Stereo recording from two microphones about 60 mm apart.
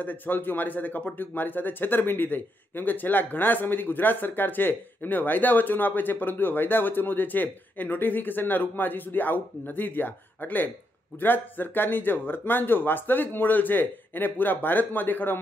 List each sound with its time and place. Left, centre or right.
0.0 s speech: left